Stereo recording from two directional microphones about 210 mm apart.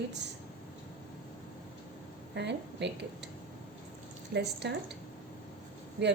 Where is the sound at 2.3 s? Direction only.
55° right (ahead or behind).